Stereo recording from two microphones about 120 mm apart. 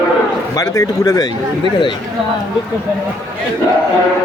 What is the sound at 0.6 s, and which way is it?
Speech, 30° left (ahead or behind).